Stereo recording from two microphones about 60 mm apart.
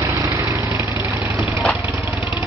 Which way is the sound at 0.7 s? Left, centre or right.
Right.